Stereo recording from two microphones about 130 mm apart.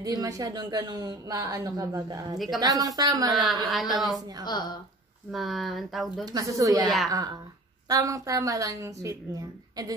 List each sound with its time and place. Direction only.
0.0 s speech: 30° right (ahead or behind)
2.3 s speech: centre (ahead or behind)
2.6 s speech: 30° right (ahead or behind)
3.6 s speech: centre (ahead or behind)
4.5 s a woman's voice: 35° left (ahead or behind)
5.3 s speech: centre (ahead or behind)
6.2 s speech: 25° right (ahead or behind)